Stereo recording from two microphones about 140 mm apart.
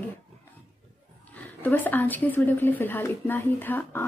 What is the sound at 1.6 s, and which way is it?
Speech, 15° left (ahead or behind).